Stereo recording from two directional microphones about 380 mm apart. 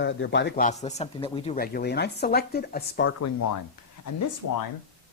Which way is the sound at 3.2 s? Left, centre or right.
Left.